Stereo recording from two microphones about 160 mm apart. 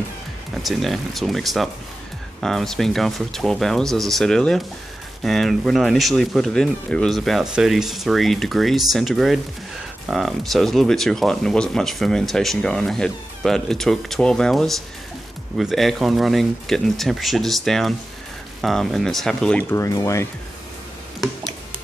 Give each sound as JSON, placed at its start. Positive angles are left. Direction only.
{"t": 0.6, "sound": "speech", "side_deg": 0}
{"t": 19.7, "sound": "speech", "side_deg": 20}